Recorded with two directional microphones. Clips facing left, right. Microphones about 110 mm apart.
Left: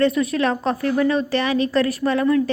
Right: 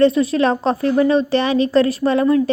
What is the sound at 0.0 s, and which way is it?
A woman's voice, 30° right (ahead or behind).